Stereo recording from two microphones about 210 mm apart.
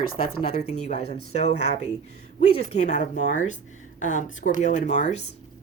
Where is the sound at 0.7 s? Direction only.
30° left (ahead or behind).